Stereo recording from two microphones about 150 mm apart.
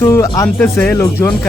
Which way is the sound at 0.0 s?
20° left (ahead or behind).